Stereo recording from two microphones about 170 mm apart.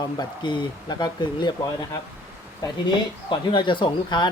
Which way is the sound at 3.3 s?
30° left (ahead or behind).